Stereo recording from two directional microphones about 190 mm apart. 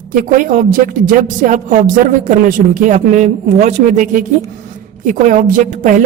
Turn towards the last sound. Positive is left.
turn(degrees=-45)  # may be behind; listen again after turning